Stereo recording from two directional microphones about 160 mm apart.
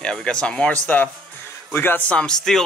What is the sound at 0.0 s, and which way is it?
A man's voice, 5° left (ahead or behind).